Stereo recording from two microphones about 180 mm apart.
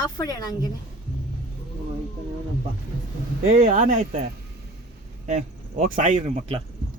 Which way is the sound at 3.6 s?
45° right (ahead or behind).